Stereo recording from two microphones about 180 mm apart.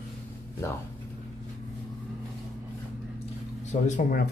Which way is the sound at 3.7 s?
40° left (ahead or behind).